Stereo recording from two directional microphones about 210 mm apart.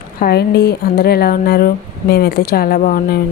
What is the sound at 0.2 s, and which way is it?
A woman's voice, 50° left (ahead or behind).